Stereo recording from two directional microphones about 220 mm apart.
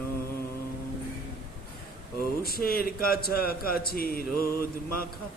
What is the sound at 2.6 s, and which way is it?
A man's voice, 40° left (ahead or behind).